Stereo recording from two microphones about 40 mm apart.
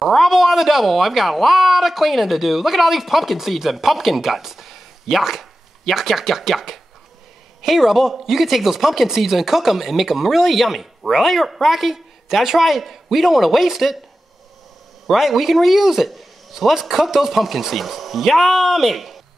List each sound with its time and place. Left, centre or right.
0.0 s speech: centre
15.0 s speech: centre